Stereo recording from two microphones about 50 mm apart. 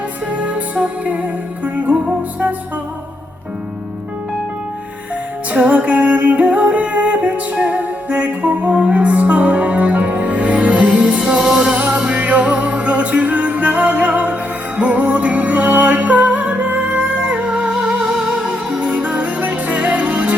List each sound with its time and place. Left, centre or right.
0.3 s music: right
5.5 s music: right
10.8 s music: centre
18.5 s music: right